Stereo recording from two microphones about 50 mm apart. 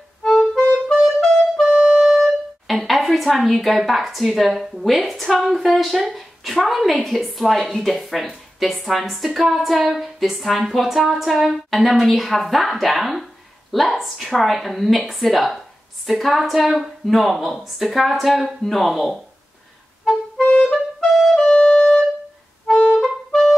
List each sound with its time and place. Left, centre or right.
0.2 s music: centre
0.9 s clarinet: centre
1.8 s wind instrument: right
2.0 s a woman's voice: centre
20.6 s clarinet: centre
21.5 s music: centre
22.7 s music: centre
22.9 s clarinet: centre